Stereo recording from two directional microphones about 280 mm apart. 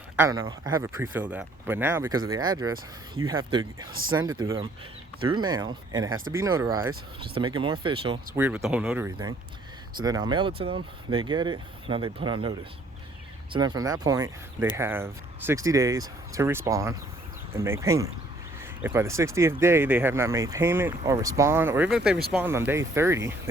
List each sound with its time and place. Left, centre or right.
0.2 s speech: centre
8.4 s speech: centre